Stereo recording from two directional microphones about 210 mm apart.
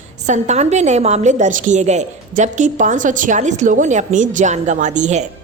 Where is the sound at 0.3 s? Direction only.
35° right (ahead or behind).